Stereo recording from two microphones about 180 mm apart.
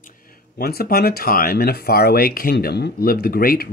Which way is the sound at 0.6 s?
60° left (ahead or behind).